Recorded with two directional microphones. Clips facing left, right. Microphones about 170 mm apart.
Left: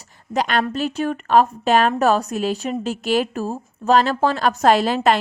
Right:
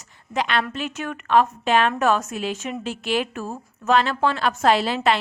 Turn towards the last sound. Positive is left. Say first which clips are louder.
# left 3 dB
turn(degrees=45)  # may be behind; listen again after turning